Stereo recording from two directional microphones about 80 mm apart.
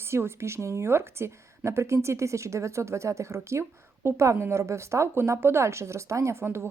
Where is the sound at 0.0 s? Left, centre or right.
Right.